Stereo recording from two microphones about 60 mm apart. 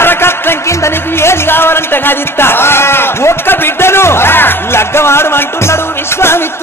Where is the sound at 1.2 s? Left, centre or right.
Left.